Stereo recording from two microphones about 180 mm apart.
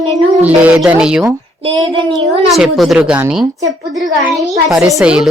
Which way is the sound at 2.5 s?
Centre (ahead or behind).